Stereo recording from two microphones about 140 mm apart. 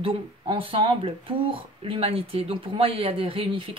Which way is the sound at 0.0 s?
40° right (ahead or behind).